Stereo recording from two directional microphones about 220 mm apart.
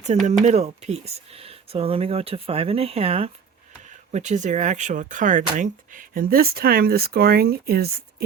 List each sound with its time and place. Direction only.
0.3 s speech: 30° right (ahead or behind)